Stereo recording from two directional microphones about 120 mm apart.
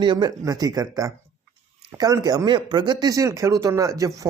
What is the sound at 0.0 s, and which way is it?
Speech, 40° right (ahead or behind).